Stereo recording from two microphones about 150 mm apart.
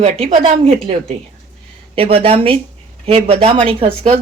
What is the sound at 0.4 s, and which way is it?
Speech, 40° right (ahead or behind).